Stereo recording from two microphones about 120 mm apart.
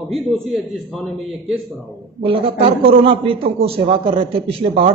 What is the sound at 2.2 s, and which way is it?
A man's voice, 50° right (ahead or behind).